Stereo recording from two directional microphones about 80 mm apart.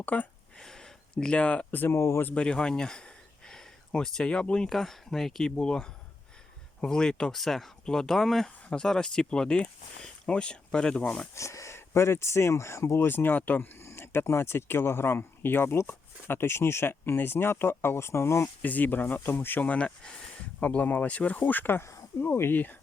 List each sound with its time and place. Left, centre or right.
0.0 s speech: centre
0.6 s speech: centre; by 2.2 s left
2.2 s speech: centre
11.3 s speech: left
18.6 s speech: left